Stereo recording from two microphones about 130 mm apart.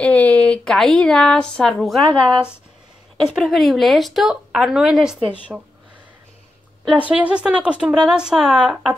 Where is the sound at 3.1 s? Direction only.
Centre (ahead or behind).